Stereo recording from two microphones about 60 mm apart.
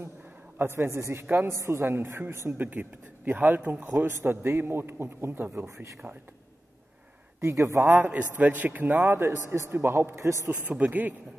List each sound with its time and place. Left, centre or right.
0.6 s a man's voice: right
2.5 s a man's voice: right
7.3 s a man's voice: right
7.9 s a man's voice: right
9.0 s a man's voice: right
10.2 s a man's voice: right
10.6 s a man's voice: right